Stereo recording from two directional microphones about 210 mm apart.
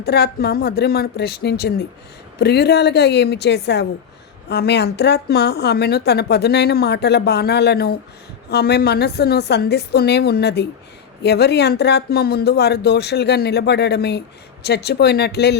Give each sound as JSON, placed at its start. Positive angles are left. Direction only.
{"t": 0.0, "sound": "a woman's voice", "side_deg": 50}